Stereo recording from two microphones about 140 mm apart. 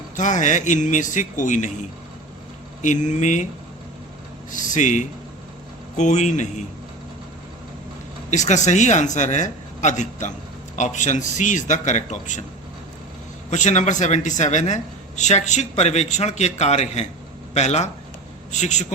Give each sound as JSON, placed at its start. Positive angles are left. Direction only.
{"t": 0.2, "sound": "speech", "side_deg": 60}
{"t": 2.8, "sound": "speech", "side_deg": 60}
{"t": 4.5, "sound": "speech", "side_deg": 65}
{"t": 8.3, "sound": "speech", "side_deg": 60}
{"t": 13.5, "sound": "a man's voice", "side_deg": 60}